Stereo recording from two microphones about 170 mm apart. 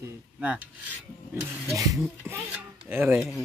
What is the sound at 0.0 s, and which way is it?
Filing, 10° right (ahead or behind).